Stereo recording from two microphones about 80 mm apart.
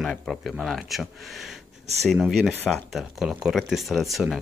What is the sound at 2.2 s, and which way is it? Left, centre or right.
Speech, centre.